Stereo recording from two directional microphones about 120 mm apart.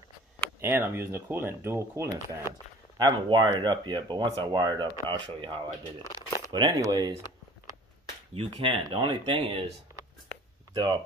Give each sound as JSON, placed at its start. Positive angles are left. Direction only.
{"t": 0.6, "sound": "speech", "side_deg": -20}
{"t": 3.0, "sound": "speech", "side_deg": -40}
{"t": 8.4, "sound": "speech", "side_deg": -50}
{"t": 8.8, "sound": "speech", "side_deg": -40}
{"t": 10.7, "sound": "speech", "side_deg": -40}